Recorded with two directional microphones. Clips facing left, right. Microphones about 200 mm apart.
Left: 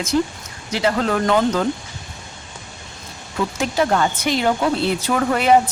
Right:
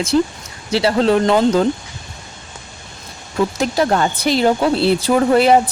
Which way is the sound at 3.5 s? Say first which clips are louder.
Even; 35° right (ahead or behind).